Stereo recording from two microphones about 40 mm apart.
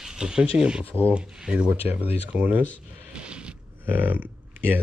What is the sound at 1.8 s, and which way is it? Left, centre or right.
Speech, right.